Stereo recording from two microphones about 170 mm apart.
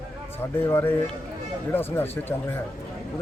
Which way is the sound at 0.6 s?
15° left (ahead or behind).